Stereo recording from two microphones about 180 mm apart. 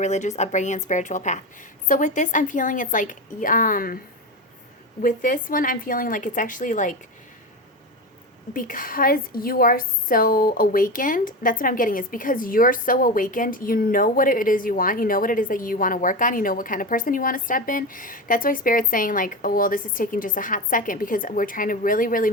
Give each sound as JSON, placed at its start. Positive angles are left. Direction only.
{"t": 0.0, "sound": "a woman's voice", "side_deg": 40}
{"t": 5.0, "sound": "a woman's voice", "side_deg": 50}
{"t": 8.5, "sound": "a woman's voice", "side_deg": 50}